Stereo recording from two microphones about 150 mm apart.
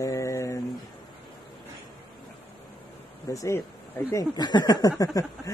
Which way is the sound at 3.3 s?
20° left (ahead or behind).